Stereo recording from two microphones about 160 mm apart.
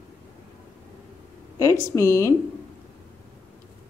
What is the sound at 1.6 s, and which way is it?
Speech, 20° left (ahead or behind).